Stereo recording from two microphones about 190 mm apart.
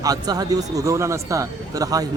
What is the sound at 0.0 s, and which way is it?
A man's voice, 20° right (ahead or behind).